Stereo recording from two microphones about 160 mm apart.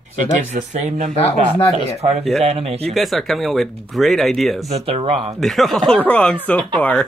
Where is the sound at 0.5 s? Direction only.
45° right (ahead or behind).